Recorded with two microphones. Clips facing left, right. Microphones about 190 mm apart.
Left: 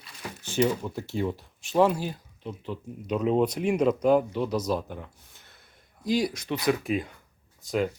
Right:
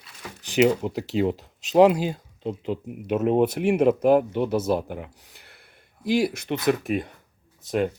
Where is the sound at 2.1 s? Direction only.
25° right (ahead or behind).